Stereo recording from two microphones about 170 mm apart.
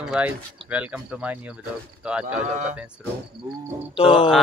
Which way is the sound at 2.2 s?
45° right (ahead or behind).